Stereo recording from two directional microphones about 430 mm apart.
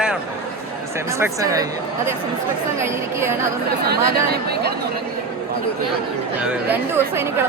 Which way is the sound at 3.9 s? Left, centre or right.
Right.